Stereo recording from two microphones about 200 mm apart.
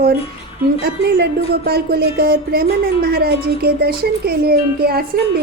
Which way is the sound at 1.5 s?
50° right (ahead or behind).